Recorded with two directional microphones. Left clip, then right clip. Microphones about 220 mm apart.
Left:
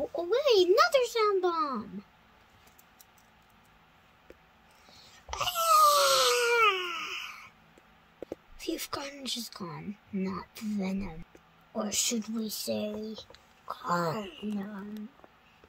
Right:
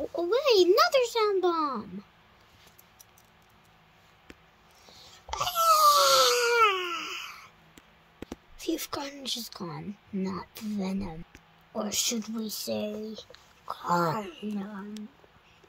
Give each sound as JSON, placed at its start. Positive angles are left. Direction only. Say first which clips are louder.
{"t": 0.1, "sound": "a sound", "louder": "right 2 dB", "side_deg": -30}
{"t": 5.3, "sound": "crying", "louder": "right 2 dB", "side_deg": -20}
{"t": 8.5, "sound": "a woman's voice", "louder": "right 3 dB", "side_deg": -20}